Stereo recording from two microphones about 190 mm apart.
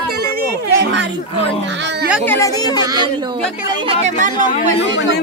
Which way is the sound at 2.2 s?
15° left (ahead or behind).